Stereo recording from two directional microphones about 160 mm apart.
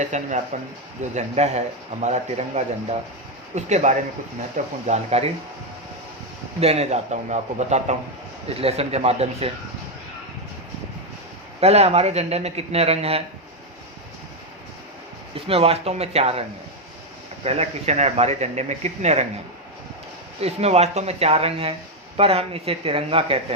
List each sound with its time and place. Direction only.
0.0 s speech: 50° right (ahead or behind)
6.6 s speech: 40° right (ahead or behind)
11.6 s speech: 40° right (ahead or behind)
15.4 s speech: 40° right (ahead or behind)
17.4 s speech: 40° right (ahead or behind)
20.4 s speech: 40° right (ahead or behind)